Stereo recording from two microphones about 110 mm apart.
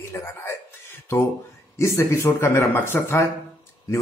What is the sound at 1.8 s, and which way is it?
Speech, 25° left (ahead or behind).